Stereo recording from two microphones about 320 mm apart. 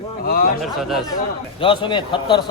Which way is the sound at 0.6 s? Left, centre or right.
Centre.